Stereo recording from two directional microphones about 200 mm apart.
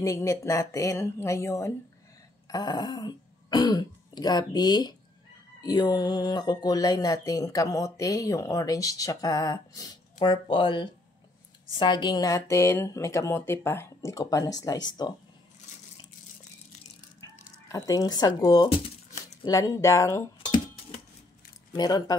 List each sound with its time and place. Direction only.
0.0 s speech: 15° left (ahead or behind)
17.6 s speech: 15° left (ahead or behind)
21.7 s speech: 20° left (ahead or behind)